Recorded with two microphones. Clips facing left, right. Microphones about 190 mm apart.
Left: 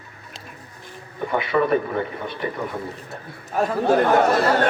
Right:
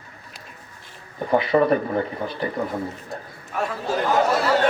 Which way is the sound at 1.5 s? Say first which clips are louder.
Right 2 dB; 35° right (ahead or behind).